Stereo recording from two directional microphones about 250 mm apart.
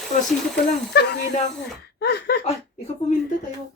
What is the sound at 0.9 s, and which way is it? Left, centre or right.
Speech, left.